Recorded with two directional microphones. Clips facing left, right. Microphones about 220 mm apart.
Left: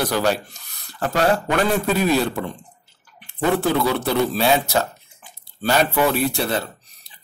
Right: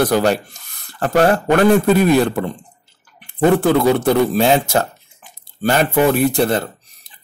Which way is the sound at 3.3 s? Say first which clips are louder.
Right 6 dB; 50° right (ahead or behind).